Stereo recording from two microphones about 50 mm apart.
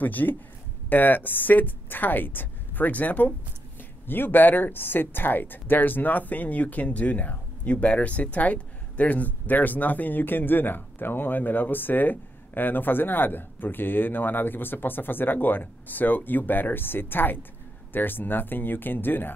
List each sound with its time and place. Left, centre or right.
0.0 s speech: left
4.1 s speech: left